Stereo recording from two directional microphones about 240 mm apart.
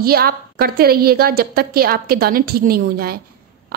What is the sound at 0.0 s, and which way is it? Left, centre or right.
A woman's voice, right.